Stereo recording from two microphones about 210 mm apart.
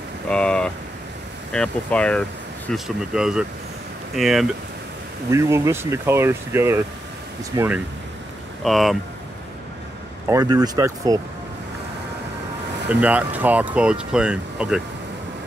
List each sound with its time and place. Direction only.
0.3 s vehicle: 5° left (ahead or behind)
1.5 s speech: 5° left (ahead or behind)
5.3 s speech: 15° right (ahead or behind); by 8.9 s centre (ahead or behind)
10.2 s speech: 15° right (ahead or behind)
12.8 s speech: 5° right (ahead or behind)